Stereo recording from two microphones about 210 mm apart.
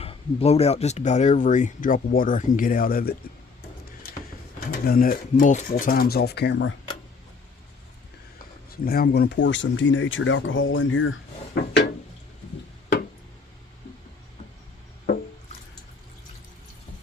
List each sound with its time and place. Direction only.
0.0 s speech: 30° left (ahead or behind); by 3.2 s 45° left (ahead or behind)
4.6 s speech: 45° left (ahead or behind); by 6.7 s 60° left (ahead or behind)
8.7 s speech: 45° left (ahead or behind); by 11.2 s 70° left (ahead or behind)
11.5 s a sound: 55° left (ahead or behind)